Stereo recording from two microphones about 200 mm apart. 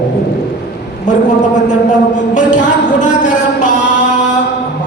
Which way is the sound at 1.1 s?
40° left (ahead or behind).